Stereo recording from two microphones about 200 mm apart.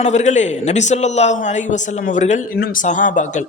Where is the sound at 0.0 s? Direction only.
35° left (ahead or behind).